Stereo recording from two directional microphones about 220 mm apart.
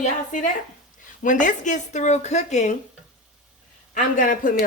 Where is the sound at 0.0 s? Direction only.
35° left (ahead or behind).